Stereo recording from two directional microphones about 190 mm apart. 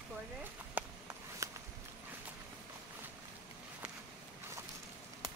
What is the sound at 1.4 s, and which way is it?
Walk, 15° right (ahead or behind).